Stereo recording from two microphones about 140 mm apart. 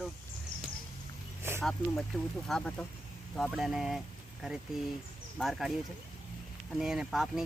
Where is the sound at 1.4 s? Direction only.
20° right (ahead or behind).